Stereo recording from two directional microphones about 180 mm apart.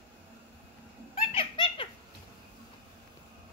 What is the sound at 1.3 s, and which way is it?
Giggle, 30° left (ahead or behind).